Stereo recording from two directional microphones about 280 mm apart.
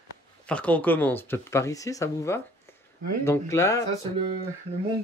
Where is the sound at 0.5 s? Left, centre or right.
Centre.